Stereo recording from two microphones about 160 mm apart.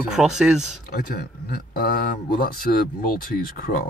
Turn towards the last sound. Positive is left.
turn(degrees=60)  # may be behind; listen again after turning